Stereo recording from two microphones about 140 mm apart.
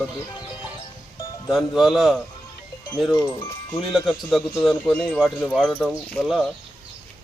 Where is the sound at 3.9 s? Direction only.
Centre (ahead or behind).